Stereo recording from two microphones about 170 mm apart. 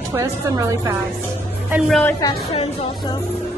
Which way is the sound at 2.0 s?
20° left (ahead or behind).